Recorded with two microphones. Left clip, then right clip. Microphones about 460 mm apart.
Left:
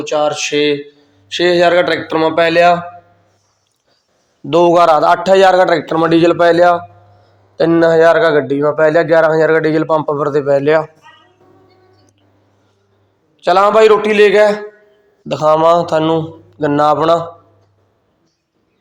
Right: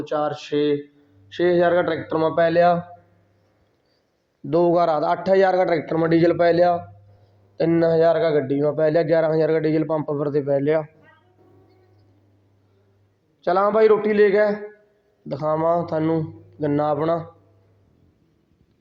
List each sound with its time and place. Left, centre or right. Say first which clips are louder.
0.0 s a man's voice: left 9 dB; right
4.4 s a man's voice: left 9 dB; right
13.4 s a man's voice: left 9 dB; right